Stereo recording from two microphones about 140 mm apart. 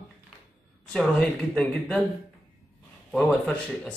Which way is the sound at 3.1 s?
5° left (ahead or behind).